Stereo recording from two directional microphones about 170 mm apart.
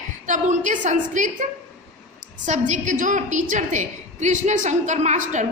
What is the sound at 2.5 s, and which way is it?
A woman's voice, 45° right (ahead or behind).